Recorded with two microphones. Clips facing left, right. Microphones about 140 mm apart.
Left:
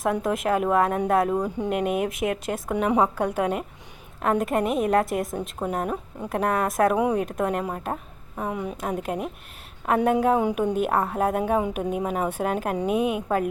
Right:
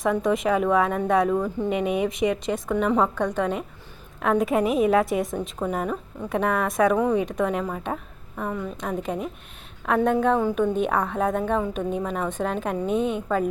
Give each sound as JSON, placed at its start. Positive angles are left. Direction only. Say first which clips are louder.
{"t": 0.0, "sound": "a woman's voice", "louder": "right 2 dB", "side_deg": 0}
{"t": 1.4, "sound": "a woman's voice", "louder": "right 1 dB", "side_deg": 15}
{"t": 1.7, "sound": "a woman's voice", "louder": "even", "side_deg": 0}
{"t": 10.8, "sound": "a woman's voice", "louder": "even", "side_deg": 5}